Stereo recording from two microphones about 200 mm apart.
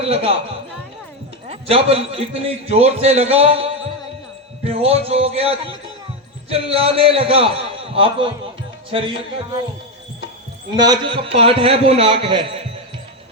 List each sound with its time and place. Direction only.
0.0 s a man's voice: 30° right (ahead or behind)
1.5 s a man's voice: 30° right (ahead or behind)
10.8 s a man's voice: 20° right (ahead or behind)